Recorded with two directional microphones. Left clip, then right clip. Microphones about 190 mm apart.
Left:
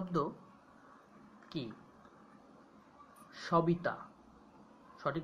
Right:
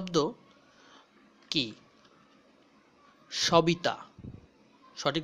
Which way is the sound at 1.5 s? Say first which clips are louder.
Right 13 dB; 45° right (ahead or behind).